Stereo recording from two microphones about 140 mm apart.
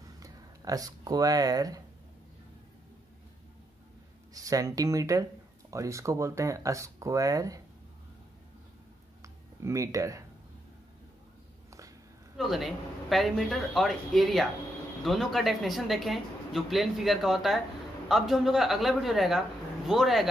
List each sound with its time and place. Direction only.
0.0 s a sound: 25° right (ahead or behind)
4.3 s speech: 25° right (ahead or behind)
9.6 s speech: 20° right (ahead or behind)
12.4 s speech: centre (ahead or behind)